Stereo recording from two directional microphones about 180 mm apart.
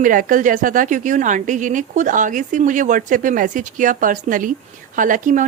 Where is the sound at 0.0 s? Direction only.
50° right (ahead or behind).